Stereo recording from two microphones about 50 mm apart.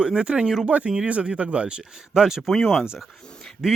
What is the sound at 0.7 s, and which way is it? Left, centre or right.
Speech, right.